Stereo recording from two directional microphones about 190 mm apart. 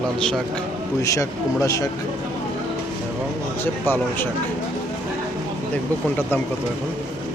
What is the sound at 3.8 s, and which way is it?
Speech, 10° left (ahead or behind).